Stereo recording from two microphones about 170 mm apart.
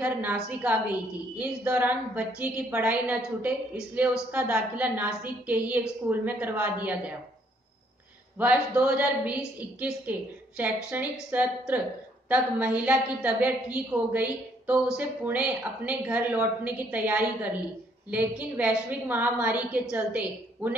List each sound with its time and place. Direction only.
0.0 s a woman's voice: 10° right (ahead or behind)
8.4 s a woman's voice: 10° right (ahead or behind)